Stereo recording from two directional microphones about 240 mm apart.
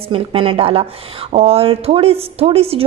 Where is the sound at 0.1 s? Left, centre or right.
Right.